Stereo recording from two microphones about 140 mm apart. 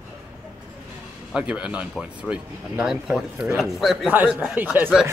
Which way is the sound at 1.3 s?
5° right (ahead or behind).